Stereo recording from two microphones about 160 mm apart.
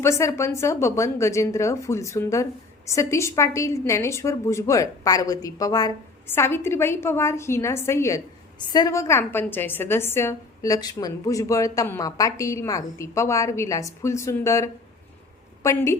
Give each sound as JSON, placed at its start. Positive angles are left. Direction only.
{"t": 0.0, "sound": "a woman's voice", "side_deg": 15}